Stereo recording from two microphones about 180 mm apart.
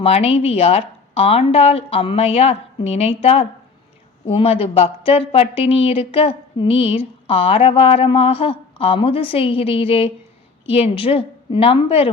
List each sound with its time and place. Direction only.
0.0 s speech: 35° left (ahead or behind)